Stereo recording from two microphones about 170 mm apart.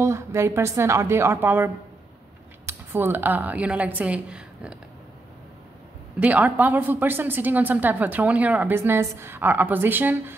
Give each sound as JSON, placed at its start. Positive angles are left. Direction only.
{"t": 0.0, "sound": "a woman's voice", "side_deg": -15}
{"t": 6.1, "sound": "a woman's voice", "side_deg": -10}